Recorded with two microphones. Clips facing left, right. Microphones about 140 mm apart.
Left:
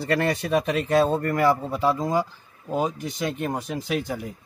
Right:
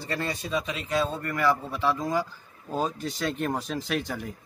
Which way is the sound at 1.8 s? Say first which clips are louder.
Left 4 dB; 25° left (ahead or behind).